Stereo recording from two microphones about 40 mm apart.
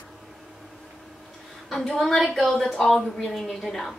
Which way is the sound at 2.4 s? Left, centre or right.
Centre.